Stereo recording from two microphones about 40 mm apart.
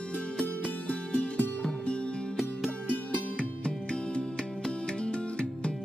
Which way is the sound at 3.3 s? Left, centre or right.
Left.